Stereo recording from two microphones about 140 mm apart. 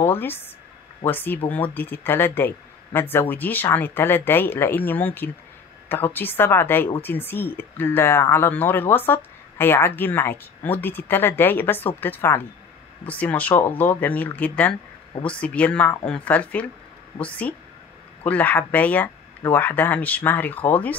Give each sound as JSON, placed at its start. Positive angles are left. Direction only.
{"t": 0.0, "sound": "speech", "side_deg": 15}